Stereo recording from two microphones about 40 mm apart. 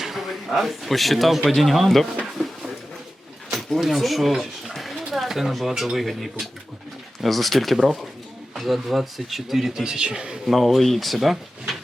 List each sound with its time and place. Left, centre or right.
0.0 s a man's voice: centre
2.4 s a sound: centre
3.8 s speech: centre
9.8 s a man's voice: centre
10.4 s speech: centre